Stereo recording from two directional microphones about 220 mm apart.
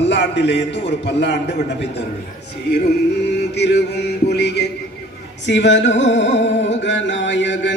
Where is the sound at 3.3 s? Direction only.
50° left (ahead or behind).